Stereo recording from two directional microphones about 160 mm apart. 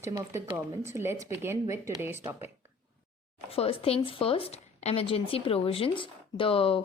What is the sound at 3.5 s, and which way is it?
Speech, 35° left (ahead or behind).